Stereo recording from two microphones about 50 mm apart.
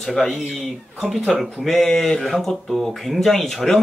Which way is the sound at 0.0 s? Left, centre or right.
Centre.